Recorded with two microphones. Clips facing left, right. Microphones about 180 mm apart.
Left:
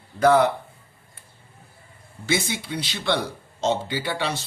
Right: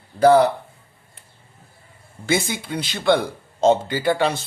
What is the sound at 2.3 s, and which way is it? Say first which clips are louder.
Speech: right 3 dB; 50° right (ahead or behind).